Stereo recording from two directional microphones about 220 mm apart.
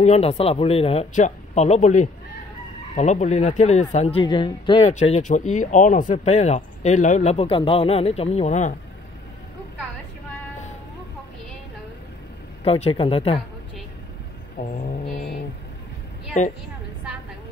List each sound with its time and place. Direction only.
0.0 s speech: 30° left (ahead or behind)
12.6 s speech: 25° left (ahead or behind)
14.6 s music: 35° left (ahead or behind)